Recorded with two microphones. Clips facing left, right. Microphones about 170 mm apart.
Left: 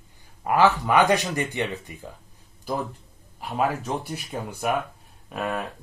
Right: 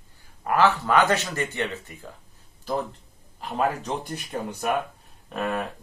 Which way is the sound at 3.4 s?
5° left (ahead or behind).